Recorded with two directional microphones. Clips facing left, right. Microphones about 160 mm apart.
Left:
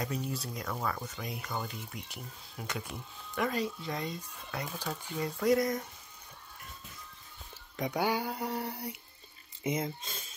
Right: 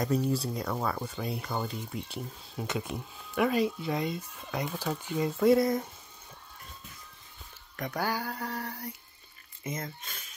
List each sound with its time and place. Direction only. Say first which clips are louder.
0.0 s speech: right 8 dB; 35° right (ahead or behind)
3.3 s speech: right 6 dB; 10° right (ahead or behind)
5.4 s speech: right 4 dB; 30° right (ahead or behind)
7.7 s speech: left 1 dB; 15° left (ahead or behind)